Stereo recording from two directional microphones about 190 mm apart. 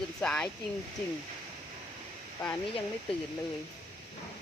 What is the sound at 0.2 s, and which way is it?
Speech, 5° left (ahead or behind).